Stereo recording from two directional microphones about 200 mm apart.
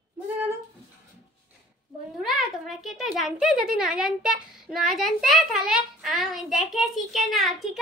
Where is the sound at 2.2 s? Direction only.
Centre (ahead or behind).